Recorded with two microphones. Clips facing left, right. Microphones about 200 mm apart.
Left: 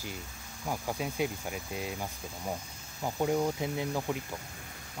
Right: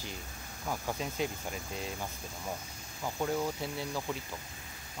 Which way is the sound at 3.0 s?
15° left (ahead or behind).